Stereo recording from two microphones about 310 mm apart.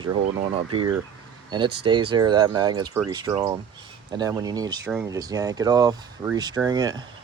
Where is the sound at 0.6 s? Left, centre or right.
Right.